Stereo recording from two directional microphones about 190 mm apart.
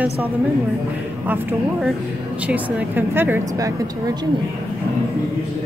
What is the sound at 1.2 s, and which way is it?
Speech, 10° right (ahead or behind).